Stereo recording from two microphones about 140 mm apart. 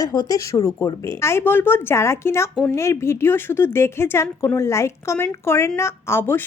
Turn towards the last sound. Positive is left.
turn(degrees=15)  # may be behind; listen again after turning